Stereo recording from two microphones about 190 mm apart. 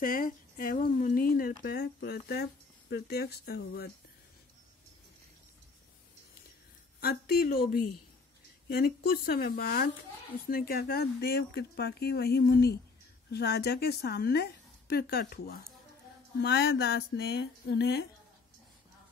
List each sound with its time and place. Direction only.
0.0 s speech: 50° left (ahead or behind)
7.0 s speech: 55° left (ahead or behind)